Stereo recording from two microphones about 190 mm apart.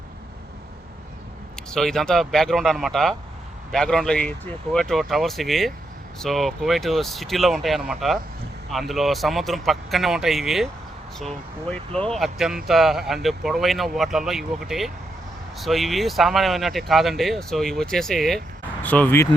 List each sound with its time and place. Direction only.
1.7 s speech: 5° left (ahead or behind)